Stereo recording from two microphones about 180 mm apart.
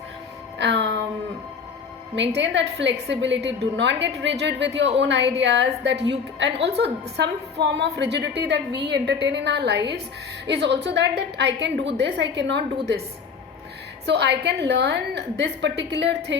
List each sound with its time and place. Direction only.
0.6 s music: 75° right (ahead or behind)
2.1 s a woman's voice: 80° right
14.1 s a woman's voice: 70° right (ahead or behind)